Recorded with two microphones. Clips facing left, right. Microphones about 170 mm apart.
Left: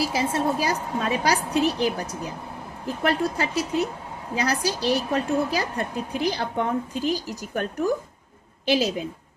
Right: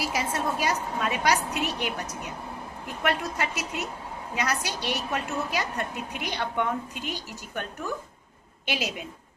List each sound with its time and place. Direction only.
0.0 s a woman's voice: 30° left (ahead or behind)